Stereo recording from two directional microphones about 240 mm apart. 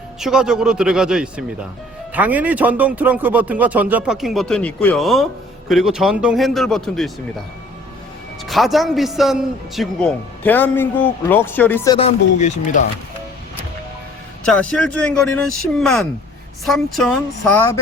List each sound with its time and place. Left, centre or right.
0.2 s a man's voice: centre
8.4 s a man's voice: centre
11.9 s speech: left
14.4 s a man's voice: centre